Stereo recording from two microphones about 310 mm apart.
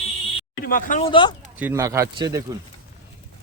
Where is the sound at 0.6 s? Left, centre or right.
Left.